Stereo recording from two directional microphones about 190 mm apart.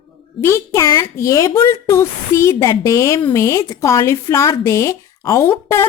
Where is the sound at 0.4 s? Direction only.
15° left (ahead or behind).